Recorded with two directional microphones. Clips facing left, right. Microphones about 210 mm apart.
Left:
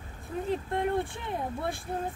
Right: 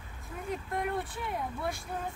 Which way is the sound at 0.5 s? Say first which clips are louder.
Left 4 dB; 25° left (ahead or behind).